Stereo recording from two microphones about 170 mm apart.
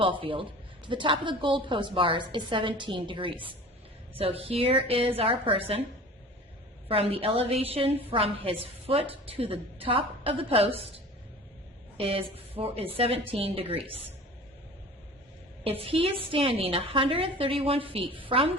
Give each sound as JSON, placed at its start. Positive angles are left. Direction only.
{"t": 0.0, "sound": "a woman's voice", "side_deg": -30}
{"t": 6.8, "sound": "a woman's voice", "side_deg": -35}
{"t": 11.9, "sound": "a woman's voice", "side_deg": -35}
{"t": 15.6, "sound": "a woman's voice", "side_deg": -35}